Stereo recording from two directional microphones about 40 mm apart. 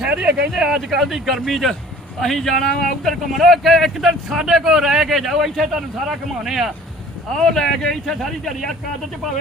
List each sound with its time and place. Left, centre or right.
0.0 s speech: right
0.5 s speech: centre
0.9 s a man's voice: centre
7.3 s speech: centre